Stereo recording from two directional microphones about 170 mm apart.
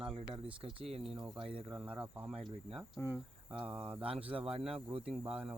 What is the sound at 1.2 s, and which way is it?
Speech, 30° right (ahead or behind).